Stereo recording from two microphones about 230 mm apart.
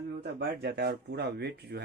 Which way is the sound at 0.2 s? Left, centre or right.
Right.